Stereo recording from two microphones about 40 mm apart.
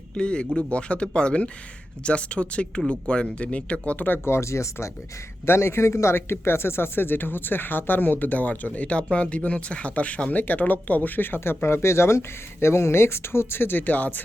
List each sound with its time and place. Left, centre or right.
0.1 s speech: left
4.3 s speech: left
5.5 s speech: left